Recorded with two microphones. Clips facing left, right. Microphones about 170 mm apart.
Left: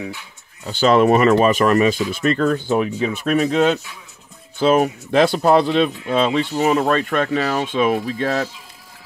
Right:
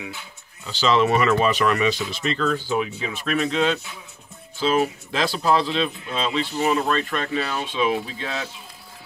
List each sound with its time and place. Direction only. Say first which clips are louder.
0.7 s speech: left 6 dB; 50° left (ahead or behind)